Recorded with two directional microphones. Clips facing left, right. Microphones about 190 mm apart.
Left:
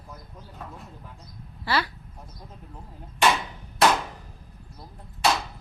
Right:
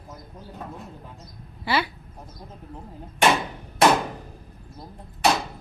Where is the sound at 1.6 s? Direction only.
25° right (ahead or behind).